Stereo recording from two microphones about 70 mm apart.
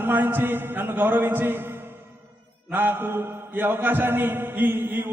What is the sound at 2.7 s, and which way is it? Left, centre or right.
Mantra, right.